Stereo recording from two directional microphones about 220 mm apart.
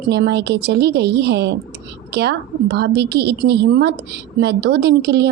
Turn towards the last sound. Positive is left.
turn(degrees=-50)  # may be behind; listen again after turning